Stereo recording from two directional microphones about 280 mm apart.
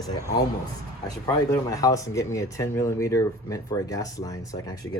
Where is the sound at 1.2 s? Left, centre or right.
Centre.